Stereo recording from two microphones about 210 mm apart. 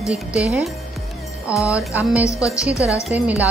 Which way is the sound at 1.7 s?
5° right (ahead or behind).